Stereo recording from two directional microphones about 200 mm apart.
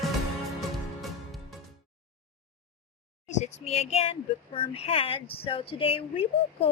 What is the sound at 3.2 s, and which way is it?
Speech, 35° left (ahead or behind).